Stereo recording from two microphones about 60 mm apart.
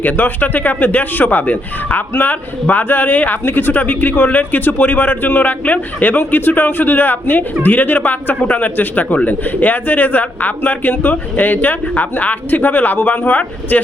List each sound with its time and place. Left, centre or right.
0.0 s speech: left